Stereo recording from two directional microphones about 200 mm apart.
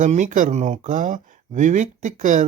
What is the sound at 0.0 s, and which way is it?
Speech, 40° right (ahead or behind).